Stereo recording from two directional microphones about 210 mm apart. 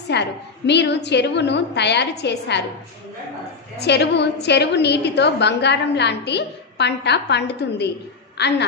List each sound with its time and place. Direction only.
0.1 s a woman's voice: 55° left (ahead or behind)
3.7 s a woman's voice: 55° left (ahead or behind)